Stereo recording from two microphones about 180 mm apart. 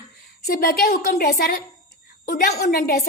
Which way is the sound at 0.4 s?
55° left (ahead or behind).